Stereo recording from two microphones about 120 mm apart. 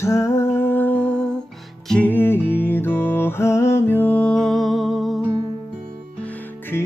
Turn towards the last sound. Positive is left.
turn(degrees=20)  # may be behind; listen again after turning